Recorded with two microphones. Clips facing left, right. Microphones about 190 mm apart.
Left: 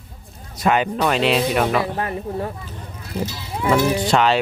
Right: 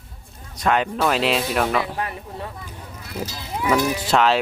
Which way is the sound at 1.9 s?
30° left (ahead or behind).